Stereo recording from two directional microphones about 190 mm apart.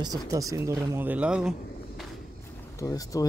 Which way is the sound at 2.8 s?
20° left (ahead or behind).